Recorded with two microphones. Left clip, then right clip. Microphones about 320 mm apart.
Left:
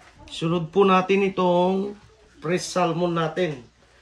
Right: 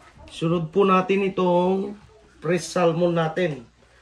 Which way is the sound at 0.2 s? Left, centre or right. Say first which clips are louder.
Right 1 dB; centre.